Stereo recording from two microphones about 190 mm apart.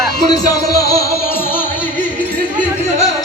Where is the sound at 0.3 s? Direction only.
15° left (ahead or behind).